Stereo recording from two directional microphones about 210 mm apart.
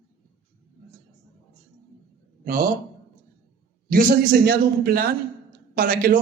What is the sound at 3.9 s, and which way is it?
Speech, 45° right (ahead or behind).